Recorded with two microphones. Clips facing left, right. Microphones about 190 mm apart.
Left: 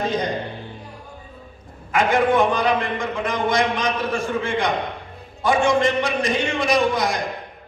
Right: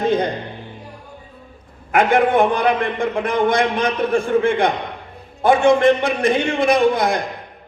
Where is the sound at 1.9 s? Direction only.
60° right (ahead or behind).